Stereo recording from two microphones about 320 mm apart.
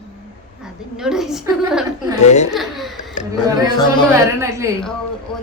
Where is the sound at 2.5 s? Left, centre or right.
Centre.